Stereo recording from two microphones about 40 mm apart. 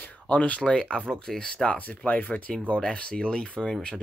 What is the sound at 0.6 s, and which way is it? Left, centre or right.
Speech, left.